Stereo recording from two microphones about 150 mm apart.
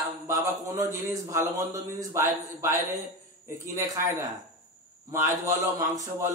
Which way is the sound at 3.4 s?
20° right (ahead or behind).